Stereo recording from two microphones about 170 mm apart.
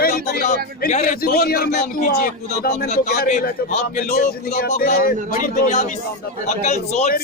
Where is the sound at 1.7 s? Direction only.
45° left (ahead or behind).